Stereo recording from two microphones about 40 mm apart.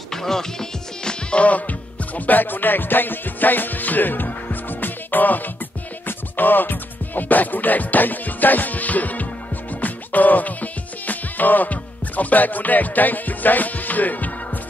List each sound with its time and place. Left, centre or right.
0.1 s music: centre
1.3 s music: left